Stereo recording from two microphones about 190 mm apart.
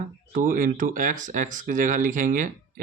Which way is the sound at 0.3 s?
45° right (ahead or behind).